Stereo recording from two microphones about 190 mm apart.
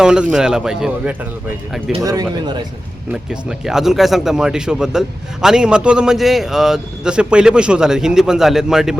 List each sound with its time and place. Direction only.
0.0 s speech: 5° right (ahead or behind)
2.0 s speech: 20° right (ahead or behind)
3.1 s speech: 5° right (ahead or behind)